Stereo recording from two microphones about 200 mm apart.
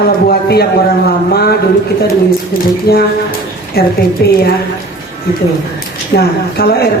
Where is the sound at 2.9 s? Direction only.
50° left (ahead or behind).